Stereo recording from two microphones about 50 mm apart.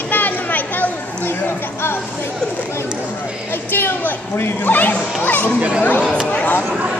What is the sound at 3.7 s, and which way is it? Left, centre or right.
Speech, left.